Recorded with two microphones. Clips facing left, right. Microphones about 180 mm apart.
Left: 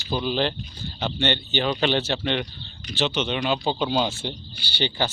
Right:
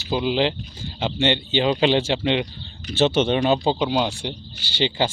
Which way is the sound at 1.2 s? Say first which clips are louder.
Right 4 dB; 90° right.